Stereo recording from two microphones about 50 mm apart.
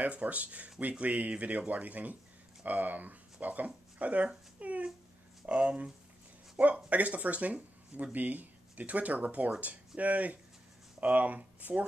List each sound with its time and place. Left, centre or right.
0.0 s speech: right
6.9 s speech: right